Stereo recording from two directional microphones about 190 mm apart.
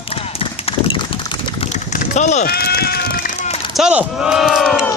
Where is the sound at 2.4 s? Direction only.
55° left (ahead or behind).